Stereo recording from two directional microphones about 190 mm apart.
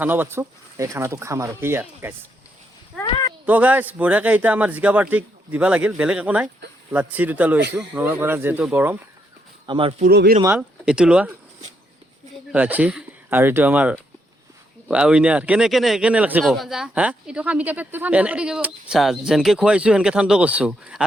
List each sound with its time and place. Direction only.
0.0 s a man's voice: 10° right (ahead or behind)
3.4 s a man's voice: 10° right (ahead or behind)
9.6 s speech: 25° right (ahead or behind)
10.0 s speech: 55° right (ahead or behind)
10.8 s speech: 5° right (ahead or behind)
12.5 s speech: 10° right (ahead or behind)